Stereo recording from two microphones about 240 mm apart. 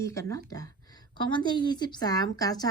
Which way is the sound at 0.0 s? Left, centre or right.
Centre.